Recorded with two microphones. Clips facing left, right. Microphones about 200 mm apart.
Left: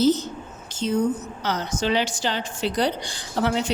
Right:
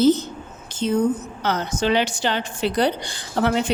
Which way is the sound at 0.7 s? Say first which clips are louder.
Right 3 dB; 55° right (ahead or behind).